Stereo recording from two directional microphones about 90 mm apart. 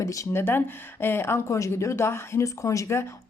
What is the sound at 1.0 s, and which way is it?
Speech, 25° left (ahead or behind).